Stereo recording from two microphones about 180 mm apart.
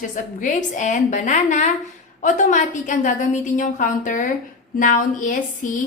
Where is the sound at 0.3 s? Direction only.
45° left (ahead or behind).